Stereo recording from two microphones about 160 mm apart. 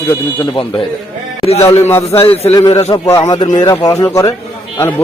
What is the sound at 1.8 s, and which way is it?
Speech, 15° left (ahead or behind).